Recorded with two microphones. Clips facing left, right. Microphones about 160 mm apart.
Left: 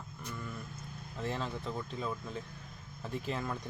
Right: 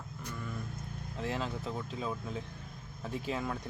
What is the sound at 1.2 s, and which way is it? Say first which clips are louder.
Speech: right 1 dB; centre (ahead or behind).